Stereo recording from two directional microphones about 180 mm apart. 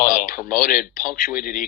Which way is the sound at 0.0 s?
50° left (ahead or behind).